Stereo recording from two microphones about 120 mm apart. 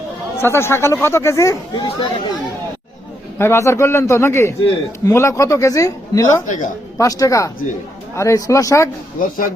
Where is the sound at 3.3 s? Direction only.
20° left (ahead or behind).